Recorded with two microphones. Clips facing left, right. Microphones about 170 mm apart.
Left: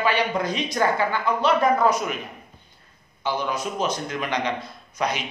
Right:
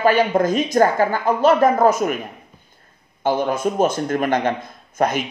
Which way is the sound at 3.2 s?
50° right (ahead or behind).